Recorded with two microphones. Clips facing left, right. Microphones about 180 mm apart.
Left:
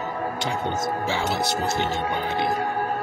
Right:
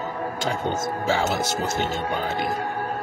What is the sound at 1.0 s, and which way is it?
Speech, 45° right (ahead or behind).